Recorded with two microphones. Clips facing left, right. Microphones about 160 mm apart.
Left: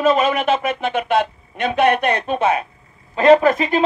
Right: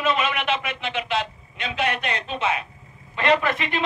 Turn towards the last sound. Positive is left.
turn(degrees=40)  # may be behind; listen again after turning